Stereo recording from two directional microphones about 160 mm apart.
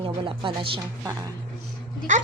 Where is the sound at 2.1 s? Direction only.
50° right (ahead or behind).